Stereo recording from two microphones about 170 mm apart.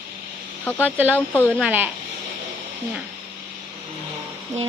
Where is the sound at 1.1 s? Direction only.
10° left (ahead or behind).